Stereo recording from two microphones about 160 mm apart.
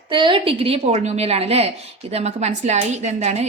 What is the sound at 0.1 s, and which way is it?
A woman's voice, 30° right (ahead or behind).